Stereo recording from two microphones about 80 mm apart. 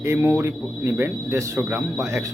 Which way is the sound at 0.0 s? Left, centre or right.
Right.